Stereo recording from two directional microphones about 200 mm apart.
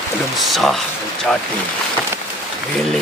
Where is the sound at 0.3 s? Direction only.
Centre (ahead or behind).